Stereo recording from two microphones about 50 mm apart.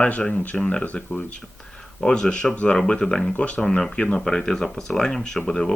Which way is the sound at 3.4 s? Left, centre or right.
Left.